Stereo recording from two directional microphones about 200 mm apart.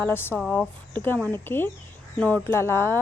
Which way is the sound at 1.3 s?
10° left (ahead or behind).